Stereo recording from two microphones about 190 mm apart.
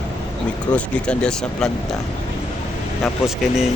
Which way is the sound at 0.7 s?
5° left (ahead or behind).